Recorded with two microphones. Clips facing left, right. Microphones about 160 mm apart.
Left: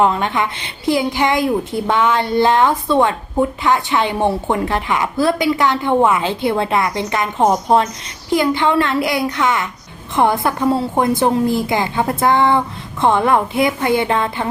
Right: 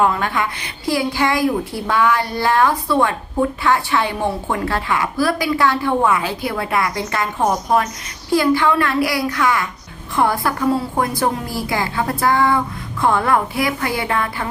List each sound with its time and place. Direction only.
0.0 s a woman's voice: 20° left (ahead or behind)